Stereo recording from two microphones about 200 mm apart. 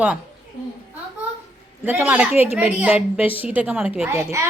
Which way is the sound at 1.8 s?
10° right (ahead or behind).